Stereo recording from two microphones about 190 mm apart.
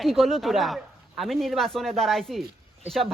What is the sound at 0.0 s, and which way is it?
Speech, centre (ahead or behind).